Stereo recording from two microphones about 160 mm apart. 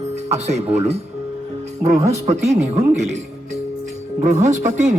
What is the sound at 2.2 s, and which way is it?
Speech, 45° right (ahead or behind).